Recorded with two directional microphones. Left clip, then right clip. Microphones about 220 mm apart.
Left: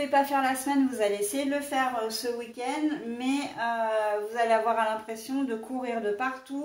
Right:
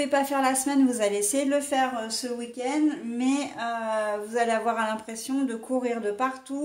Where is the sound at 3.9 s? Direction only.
50° right (ahead or behind).